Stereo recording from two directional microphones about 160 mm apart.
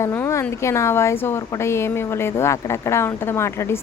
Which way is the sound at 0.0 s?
15° left (ahead or behind).